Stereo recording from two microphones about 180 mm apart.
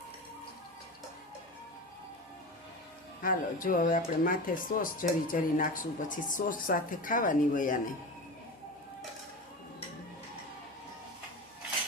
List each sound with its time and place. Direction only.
3.2 s speech: 50° left (ahead or behind)